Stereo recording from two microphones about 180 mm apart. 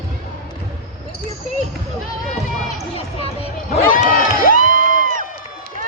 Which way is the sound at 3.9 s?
50° left (ahead or behind).